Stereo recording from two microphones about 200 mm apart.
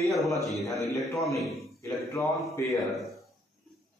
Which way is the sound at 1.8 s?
15° left (ahead or behind).